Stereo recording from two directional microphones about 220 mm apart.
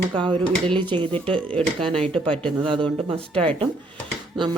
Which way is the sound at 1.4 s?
5° left (ahead or behind).